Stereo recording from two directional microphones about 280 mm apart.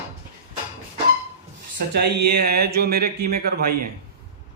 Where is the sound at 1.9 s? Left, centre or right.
Right.